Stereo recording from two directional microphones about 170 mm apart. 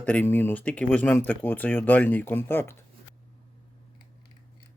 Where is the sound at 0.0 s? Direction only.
10° left (ahead or behind).